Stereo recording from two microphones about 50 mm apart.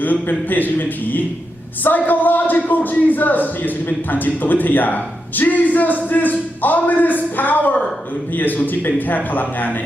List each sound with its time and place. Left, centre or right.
0.0 s a man's voice: left